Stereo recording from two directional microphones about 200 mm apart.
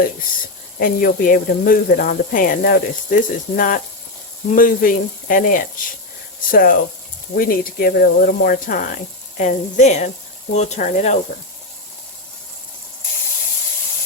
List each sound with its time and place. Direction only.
0.8 s speech: 45° left (ahead or behind)